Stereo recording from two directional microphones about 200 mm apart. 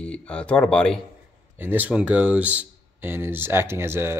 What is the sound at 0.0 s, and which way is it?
Speech, 5° left (ahead or behind).